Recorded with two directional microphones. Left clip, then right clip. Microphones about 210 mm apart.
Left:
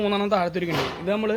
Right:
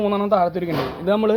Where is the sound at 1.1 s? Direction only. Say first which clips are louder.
Right 7 dB; 20° right (ahead or behind).